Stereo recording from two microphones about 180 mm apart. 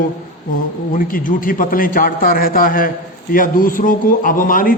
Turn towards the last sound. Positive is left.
turn(degrees=50)  # may be behind; listen again after turning